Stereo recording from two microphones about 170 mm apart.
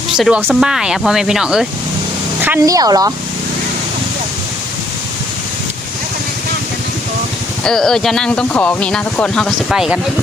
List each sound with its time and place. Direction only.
0.1 s speech: 5° right (ahead or behind)
2.4 s a woman's voice: 15° right (ahead or behind)
7.6 s speech: 5° left (ahead or behind)